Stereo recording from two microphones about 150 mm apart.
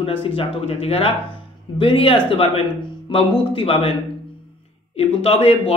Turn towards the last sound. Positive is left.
turn(degrees=40)  # may be behind; listen again after turning